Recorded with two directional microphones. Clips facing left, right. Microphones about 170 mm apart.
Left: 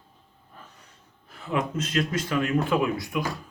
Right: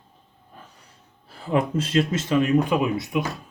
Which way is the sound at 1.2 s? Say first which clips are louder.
Right 5 dB; 30° right (ahead or behind).